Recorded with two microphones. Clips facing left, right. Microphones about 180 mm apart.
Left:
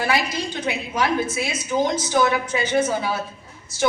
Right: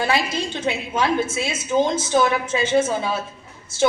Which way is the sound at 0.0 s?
25° right (ahead or behind).